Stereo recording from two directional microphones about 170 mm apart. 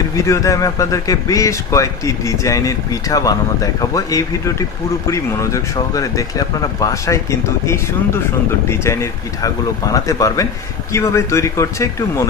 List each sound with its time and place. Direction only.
0.1 s speech: 20° left (ahead or behind)